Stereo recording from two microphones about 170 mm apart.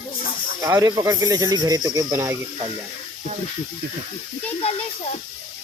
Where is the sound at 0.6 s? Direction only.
20° right (ahead or behind).